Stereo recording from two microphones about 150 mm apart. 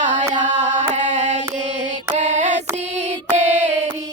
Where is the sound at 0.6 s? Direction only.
50° right (ahead or behind).